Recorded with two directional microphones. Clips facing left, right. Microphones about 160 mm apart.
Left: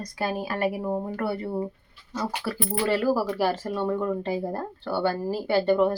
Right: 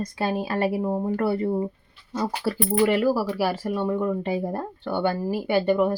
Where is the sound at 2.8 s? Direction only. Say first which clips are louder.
Right 2 dB; 10° right (ahead or behind).